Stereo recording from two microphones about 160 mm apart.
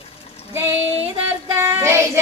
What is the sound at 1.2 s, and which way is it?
A woman's voice, 20° right (ahead or behind).